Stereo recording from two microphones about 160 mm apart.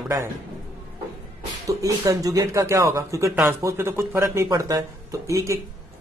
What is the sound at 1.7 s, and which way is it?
Speech, 20° right (ahead or behind).